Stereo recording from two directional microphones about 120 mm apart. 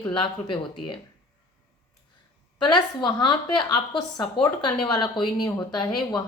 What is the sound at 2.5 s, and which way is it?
Speech, 40° left (ahead or behind).